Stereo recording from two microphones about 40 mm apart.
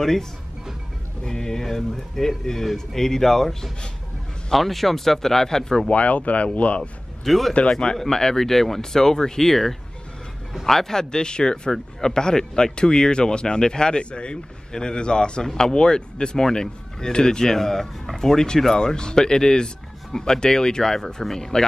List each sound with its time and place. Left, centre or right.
0.0 s speech: centre
5.9 s speech: left
7.2 s speech: centre
8.0 s speech: centre